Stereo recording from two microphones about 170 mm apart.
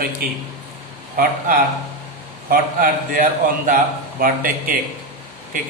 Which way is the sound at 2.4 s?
55° right (ahead or behind).